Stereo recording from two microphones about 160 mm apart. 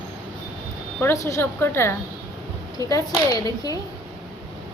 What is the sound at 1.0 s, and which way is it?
A woman's voice, 20° left (ahead or behind).